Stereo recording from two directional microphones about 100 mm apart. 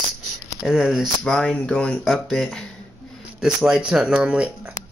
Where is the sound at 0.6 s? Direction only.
5° right (ahead or behind).